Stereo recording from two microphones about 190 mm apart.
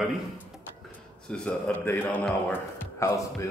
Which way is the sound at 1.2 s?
5° left (ahead or behind).